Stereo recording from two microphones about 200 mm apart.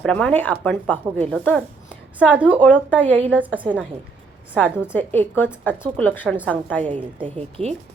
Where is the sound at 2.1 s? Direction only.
5° right (ahead or behind).